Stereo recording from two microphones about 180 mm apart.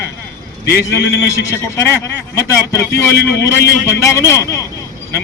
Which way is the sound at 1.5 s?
15° left (ahead or behind).